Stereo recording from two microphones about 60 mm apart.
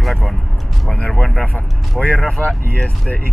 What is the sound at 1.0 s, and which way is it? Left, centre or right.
Speech, centre.